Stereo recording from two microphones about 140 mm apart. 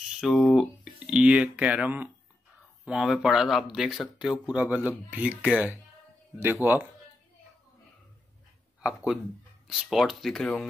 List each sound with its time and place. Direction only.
0.2 s speech: centre (ahead or behind); by 6.9 s 15° right (ahead or behind)
8.8 s speech: centre (ahead or behind)